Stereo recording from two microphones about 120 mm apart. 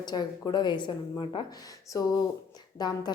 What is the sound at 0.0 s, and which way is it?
Speech, 35° left (ahead or behind).